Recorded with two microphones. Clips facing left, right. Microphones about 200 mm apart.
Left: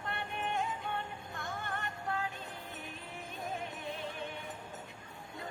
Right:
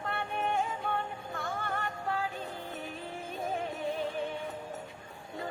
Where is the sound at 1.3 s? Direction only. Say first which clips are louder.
Right 5 dB; 90° right.